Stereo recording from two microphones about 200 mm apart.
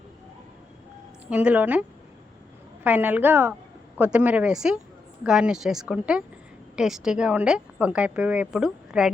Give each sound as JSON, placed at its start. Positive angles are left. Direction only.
{"t": 1.3, "sound": "a woman's voice", "side_deg": -5}
{"t": 2.8, "sound": "a woman's voice", "side_deg": -10}